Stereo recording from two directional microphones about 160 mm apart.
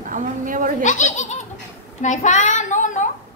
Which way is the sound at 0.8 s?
50° left (ahead or behind).